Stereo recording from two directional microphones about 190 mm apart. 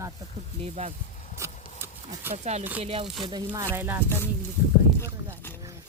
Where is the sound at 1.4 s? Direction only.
15° right (ahead or behind).